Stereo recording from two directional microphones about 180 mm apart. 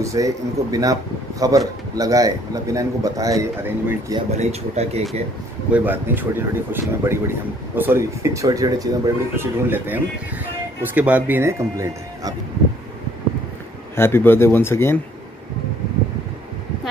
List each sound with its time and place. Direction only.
0.0 s speech: 20° right (ahead or behind)
4.3 s speech: 35° right (ahead or behind)
5.7 s speech: 10° right (ahead or behind)
13.9 s speech: 15° left (ahead or behind)